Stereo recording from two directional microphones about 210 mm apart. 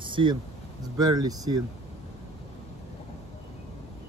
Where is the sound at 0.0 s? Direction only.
25° right (ahead or behind).